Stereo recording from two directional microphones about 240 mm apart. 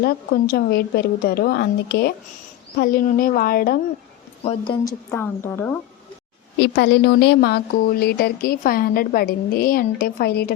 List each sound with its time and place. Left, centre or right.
0.0 s speech: left
4.4 s a woman's voice: centre
6.6 s speech: left